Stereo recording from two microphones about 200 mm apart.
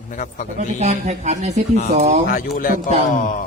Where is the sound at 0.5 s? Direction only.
35° right (ahead or behind).